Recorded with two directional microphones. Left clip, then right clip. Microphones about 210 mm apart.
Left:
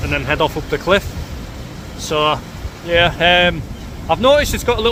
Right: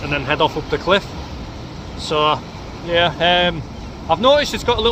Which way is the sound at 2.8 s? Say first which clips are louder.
Left 3 dB; 5° left (ahead or behind).